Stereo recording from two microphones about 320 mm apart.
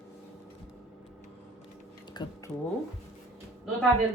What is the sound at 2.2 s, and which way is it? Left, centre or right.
Speech, centre.